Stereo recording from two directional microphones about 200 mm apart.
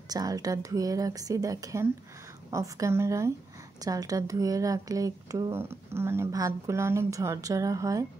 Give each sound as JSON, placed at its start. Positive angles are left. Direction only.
{"t": 0.1, "sound": "a woman's voice", "side_deg": -20}